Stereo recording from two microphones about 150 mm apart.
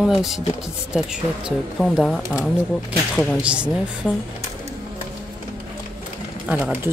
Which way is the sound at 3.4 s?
5° right (ahead or behind).